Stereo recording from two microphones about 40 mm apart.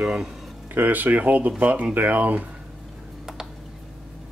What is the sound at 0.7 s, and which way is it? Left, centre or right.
Speech, right.